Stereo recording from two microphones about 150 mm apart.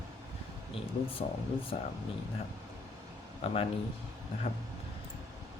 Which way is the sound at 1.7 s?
50° left (ahead or behind).